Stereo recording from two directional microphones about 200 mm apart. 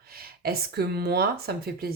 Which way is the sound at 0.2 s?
50° right (ahead or behind).